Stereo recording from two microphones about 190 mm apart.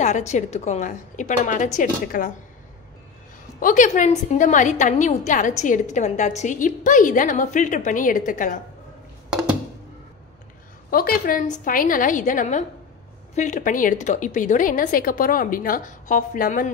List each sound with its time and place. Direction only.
0.0 s a woman's voice: 40° left (ahead or behind)
3.5 s a woman's voice: 45° left (ahead or behind)
9.3 s a sound: 5° right (ahead or behind)
10.9 s a woman's voice: 50° left (ahead or behind)